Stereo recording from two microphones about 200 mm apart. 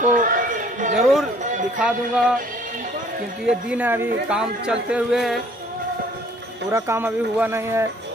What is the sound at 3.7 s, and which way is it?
Speech, 10° right (ahead or behind).